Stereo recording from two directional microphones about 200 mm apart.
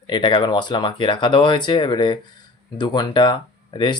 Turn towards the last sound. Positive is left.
turn(degrees=25)  # may be behind; listen again after turning